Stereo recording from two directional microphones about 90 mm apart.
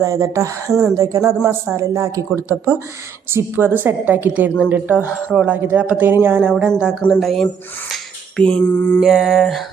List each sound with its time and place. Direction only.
0.0 s a woman's voice: 35° right (ahead or behind)
0.7 s mantra: 5° right (ahead or behind)
0.9 s a woman's voice: 35° right (ahead or behind)
3.3 s a woman's voice: 20° right (ahead or behind)
6.7 s speech: 10° right (ahead or behind)
7.1 s mantra: centre (ahead or behind)
8.4 s mantra: 10° left (ahead or behind)
9.0 s mantra: centre (ahead or behind)